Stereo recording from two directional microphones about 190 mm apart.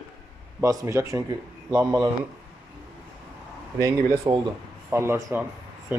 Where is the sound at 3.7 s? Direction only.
15° right (ahead or behind).